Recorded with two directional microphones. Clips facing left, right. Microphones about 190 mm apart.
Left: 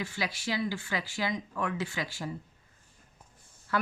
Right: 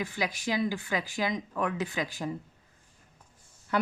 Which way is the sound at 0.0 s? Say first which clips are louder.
Right 2 dB; 15° right (ahead or behind).